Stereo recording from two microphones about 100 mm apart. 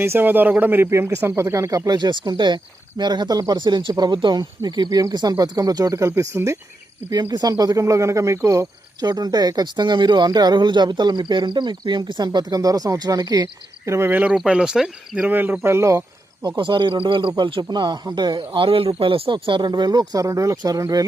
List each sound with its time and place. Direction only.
0.0 s speech: 20° right (ahead or behind)
2.0 s speech: 50° right (ahead or behind); by 6.6 s 30° right (ahead or behind)
7.1 s speech: 45° right (ahead or behind)
14.1 s speech: 15° right (ahead or behind)
15.3 s speech: 20° right (ahead or behind)
16.5 s speech: 50° right (ahead or behind)